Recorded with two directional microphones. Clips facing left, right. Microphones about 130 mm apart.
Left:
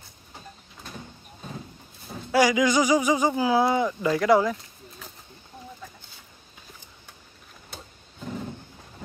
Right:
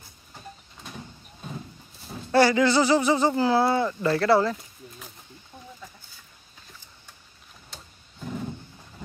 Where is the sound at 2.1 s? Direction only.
10° left (ahead or behind).